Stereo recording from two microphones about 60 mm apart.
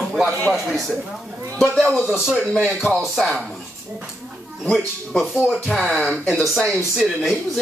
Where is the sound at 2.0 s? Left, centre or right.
Centre.